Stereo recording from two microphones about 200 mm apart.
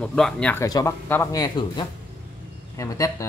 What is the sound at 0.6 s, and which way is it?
Speech, 15° left (ahead or behind).